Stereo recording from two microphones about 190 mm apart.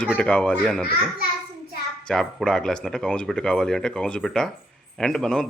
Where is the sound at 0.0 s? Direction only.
5° left (ahead or behind).